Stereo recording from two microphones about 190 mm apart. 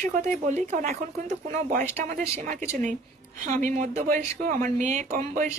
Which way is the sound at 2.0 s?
40° right (ahead or behind).